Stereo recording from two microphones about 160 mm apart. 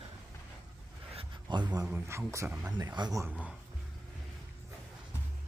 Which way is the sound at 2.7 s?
25° right (ahead or behind).